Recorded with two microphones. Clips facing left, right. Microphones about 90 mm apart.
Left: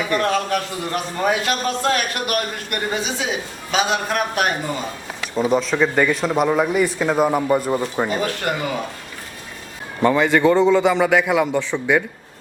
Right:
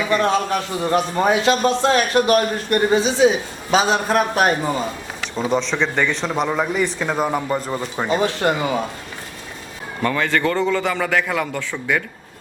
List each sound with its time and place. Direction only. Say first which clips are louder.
0.1 s a man's voice: right 2 dB; 20° right (ahead or behind); by 4.5 s 35° right (ahead or behind)
5.4 s speech: left 2 dB; 5° left (ahead or behind)
8.0 s a man's voice: right 3 dB; 25° right (ahead or behind)
10.0 s a man's voice: left 4 dB; 15° left (ahead or behind)